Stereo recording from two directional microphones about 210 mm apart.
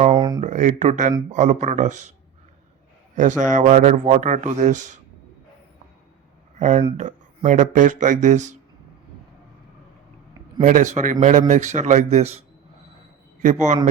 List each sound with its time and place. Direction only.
0.2 s a sound: 20° right (ahead or behind)
0.4 s a man's voice: 35° right (ahead or behind)
3.2 s a man's voice: 35° right (ahead or behind)
6.6 s a man's voice: 35° right (ahead or behind)
10.6 s a man's voice: 35° right (ahead or behind)